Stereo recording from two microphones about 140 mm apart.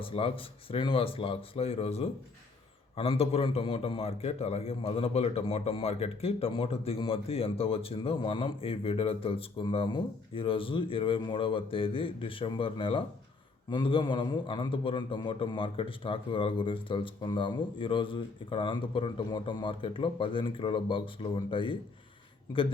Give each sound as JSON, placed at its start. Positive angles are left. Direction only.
{"t": 0.0, "sound": "a man's voice", "side_deg": 40}